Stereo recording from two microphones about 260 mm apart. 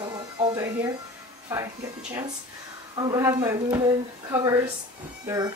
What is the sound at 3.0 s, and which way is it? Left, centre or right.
Speech, centre.